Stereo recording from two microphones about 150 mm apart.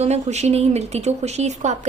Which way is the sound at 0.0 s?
50° right (ahead or behind).